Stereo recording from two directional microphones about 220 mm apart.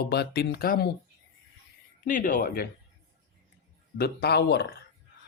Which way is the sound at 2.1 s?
40° left (ahead or behind).